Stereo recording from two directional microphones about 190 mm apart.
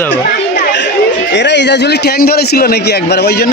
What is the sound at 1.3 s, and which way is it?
A man's voice, 65° left (ahead or behind).